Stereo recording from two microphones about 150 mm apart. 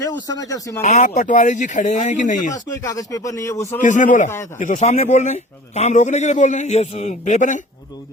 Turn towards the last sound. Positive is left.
turn(degrees=55)  # may be behind; listen again after turning